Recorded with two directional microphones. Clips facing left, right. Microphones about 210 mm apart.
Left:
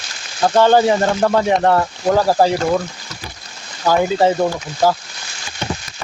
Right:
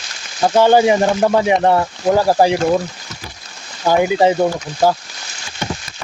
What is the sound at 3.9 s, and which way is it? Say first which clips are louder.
Speech: right 1 dB; 15° right (ahead or behind).